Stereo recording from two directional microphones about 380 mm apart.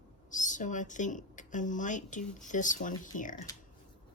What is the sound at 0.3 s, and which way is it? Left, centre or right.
Speech, centre.